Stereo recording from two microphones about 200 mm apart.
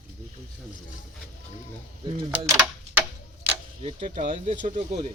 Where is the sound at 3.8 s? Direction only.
25° right (ahead or behind).